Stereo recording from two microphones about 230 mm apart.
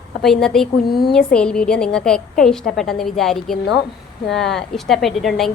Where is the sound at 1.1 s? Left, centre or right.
Centre.